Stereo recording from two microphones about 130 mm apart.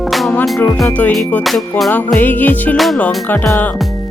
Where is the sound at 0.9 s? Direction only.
10° left (ahead or behind).